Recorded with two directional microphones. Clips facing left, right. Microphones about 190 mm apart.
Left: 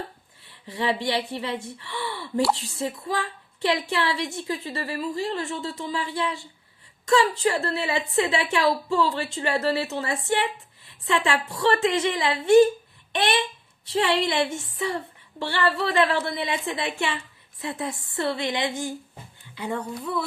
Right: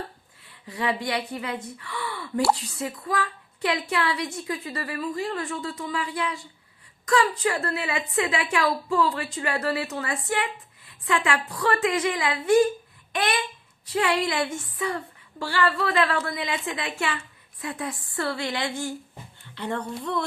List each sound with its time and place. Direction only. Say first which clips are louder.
0.7 s a woman's voice: left 2 dB; 25° left (ahead or behind); by 20.2 s 5° left (ahead or behind)